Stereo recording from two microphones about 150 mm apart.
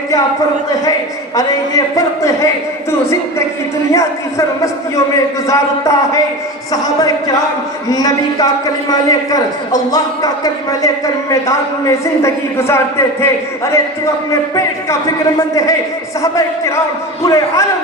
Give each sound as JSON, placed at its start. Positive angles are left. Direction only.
{"t": 1.4, "sound": "a man's voice", "side_deg": 25}
{"t": 3.9, "sound": "a man's voice", "side_deg": 20}
{"t": 17.2, "sound": "a man's voice", "side_deg": 20}